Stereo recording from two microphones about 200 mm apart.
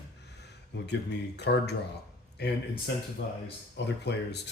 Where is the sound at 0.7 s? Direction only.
60° left (ahead or behind).